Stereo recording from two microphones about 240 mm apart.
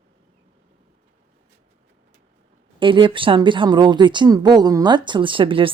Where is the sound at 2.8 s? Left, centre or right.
Right.